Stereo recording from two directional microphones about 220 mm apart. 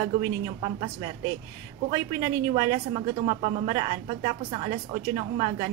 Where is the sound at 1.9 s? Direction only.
20° right (ahead or behind).